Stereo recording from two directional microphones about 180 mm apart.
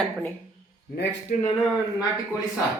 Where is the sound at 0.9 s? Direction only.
65° left (ahead or behind).